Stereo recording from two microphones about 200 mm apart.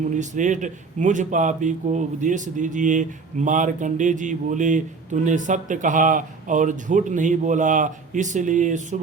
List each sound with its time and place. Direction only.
0.1 s speech: 40° right (ahead or behind)